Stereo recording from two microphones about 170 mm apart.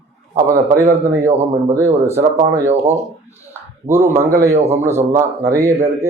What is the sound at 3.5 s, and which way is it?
A man's voice, 15° right (ahead or behind).